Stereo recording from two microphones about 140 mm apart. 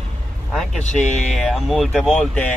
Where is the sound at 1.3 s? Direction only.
Centre (ahead or behind).